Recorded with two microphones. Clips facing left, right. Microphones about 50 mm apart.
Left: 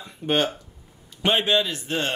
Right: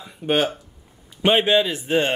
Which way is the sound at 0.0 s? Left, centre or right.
Centre.